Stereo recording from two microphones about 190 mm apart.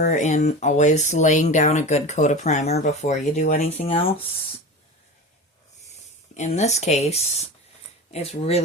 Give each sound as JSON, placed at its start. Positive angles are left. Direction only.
{"t": 0.1, "sound": "speech", "side_deg": 40}
{"t": 6.3, "sound": "speech", "side_deg": 35}